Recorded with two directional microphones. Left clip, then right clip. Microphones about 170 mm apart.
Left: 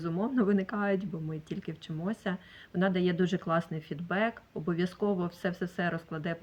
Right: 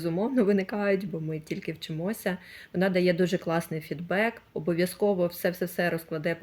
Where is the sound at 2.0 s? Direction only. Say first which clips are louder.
Right 5 dB; 15° right (ahead or behind).